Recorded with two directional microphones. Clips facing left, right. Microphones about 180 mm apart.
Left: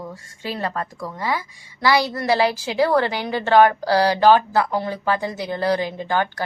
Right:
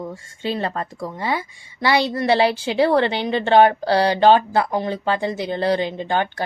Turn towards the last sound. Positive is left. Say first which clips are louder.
# right 1 dB
turn(degrees=-25)  # may be behind; listen again after turning